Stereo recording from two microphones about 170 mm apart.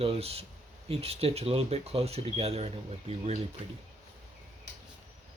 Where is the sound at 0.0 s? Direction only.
35° right (ahead or behind).